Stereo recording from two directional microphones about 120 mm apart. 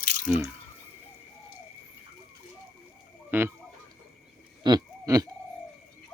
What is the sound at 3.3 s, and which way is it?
Speech, 20° right (ahead or behind).